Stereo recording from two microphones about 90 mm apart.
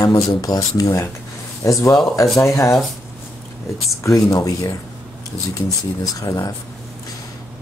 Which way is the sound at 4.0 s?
35° left (ahead or behind).